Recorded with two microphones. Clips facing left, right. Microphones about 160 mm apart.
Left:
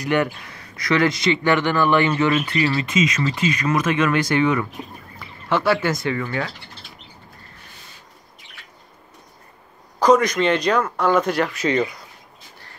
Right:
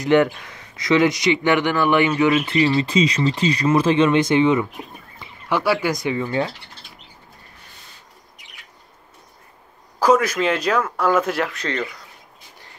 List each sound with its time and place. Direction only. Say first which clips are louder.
0.0 s speech: right 5 dB; 20° right (ahead or behind)
2.5 s speech: right 3 dB; 25° right (ahead or behind)
5.2 s speech: left 1 dB; 10° right (ahead or behind)
9.9 s speech: left 1 dB; 5° right (ahead or behind)
11.6 s speech: left 6 dB; 15° left (ahead or behind)